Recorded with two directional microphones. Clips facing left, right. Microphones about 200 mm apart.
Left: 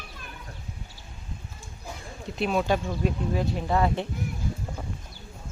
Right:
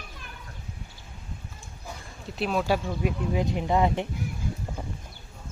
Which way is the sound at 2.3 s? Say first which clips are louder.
Left 1 dB; centre (ahead or behind).